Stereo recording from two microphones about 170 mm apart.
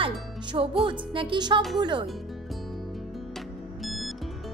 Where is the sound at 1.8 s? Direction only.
30° right (ahead or behind).